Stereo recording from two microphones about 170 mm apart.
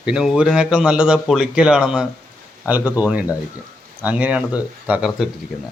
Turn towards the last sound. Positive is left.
turn(degrees=-5)  # may be behind; listen again after turning